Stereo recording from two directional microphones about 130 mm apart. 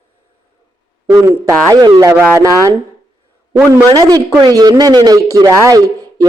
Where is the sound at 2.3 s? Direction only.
20° right (ahead or behind).